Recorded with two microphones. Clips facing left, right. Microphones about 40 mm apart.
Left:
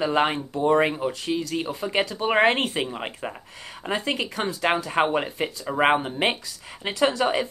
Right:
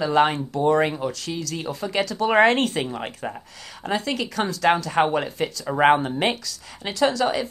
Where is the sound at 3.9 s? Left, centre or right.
Left.